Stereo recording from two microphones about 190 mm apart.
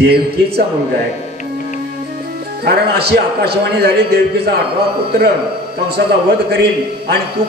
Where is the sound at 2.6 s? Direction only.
60° right (ahead or behind).